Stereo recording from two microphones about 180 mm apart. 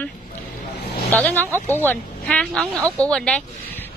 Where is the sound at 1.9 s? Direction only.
5° left (ahead or behind).